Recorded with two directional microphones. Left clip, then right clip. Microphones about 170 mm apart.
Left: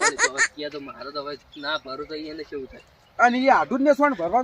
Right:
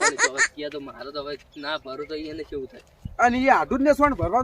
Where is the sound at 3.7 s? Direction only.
15° right (ahead or behind).